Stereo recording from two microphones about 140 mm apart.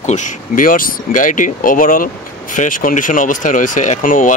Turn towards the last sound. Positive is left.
turn(degrees=75)  # may be behind; listen again after turning